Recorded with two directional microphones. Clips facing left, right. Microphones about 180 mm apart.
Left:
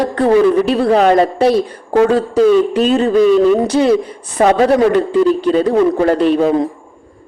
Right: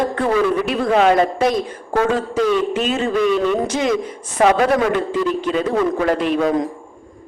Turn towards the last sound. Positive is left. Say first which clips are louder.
# left 5 dB
turn(degrees=30)  # may be behind; listen again after turning